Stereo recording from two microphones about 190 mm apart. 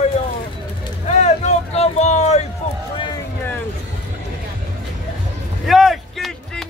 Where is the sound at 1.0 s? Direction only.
35° left (ahead or behind).